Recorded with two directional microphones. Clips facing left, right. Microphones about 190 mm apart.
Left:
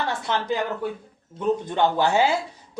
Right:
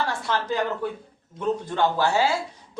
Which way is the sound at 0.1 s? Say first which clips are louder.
Left 1 dB; 20° left (ahead or behind).